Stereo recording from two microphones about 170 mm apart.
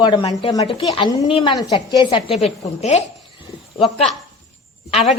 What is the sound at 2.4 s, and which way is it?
A woman's voice, 40° left (ahead or behind).